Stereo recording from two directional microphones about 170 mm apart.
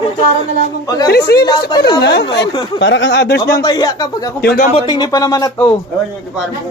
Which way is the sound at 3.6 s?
25° left (ahead or behind).